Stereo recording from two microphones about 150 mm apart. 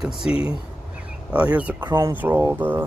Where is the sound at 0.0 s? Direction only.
5° right (ahead or behind).